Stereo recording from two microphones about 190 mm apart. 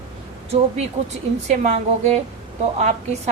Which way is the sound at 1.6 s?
35° right (ahead or behind).